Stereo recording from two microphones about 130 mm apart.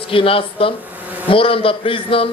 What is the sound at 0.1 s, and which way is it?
A man's voice, 45° left (ahead or behind).